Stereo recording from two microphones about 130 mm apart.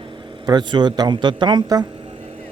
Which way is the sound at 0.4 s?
35° right (ahead or behind).